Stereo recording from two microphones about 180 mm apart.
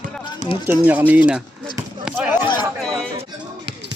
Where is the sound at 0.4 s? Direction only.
25° left (ahead or behind).